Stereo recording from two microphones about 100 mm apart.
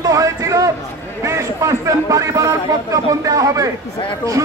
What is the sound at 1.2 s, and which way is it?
A man's voice, 30° right (ahead or behind).